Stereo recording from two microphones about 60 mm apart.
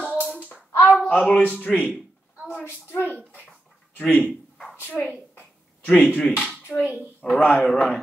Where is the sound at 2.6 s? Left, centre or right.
Left.